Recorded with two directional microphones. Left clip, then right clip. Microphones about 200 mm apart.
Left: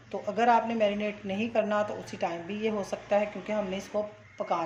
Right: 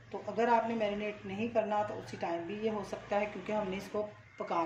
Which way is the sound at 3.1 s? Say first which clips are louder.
Left 6 dB; 20° left (ahead or behind).